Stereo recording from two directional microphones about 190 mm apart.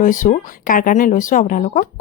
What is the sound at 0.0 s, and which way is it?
Speech, 45° left (ahead or behind).